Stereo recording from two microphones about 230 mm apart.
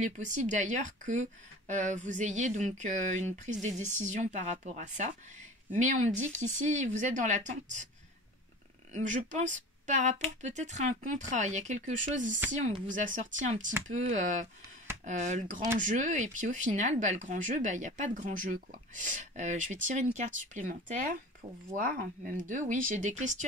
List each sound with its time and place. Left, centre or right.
0.0 s speech: right
8.9 s speech: right